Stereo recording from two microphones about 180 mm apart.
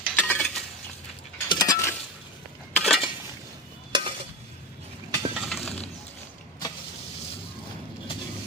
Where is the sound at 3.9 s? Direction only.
30° right (ahead or behind).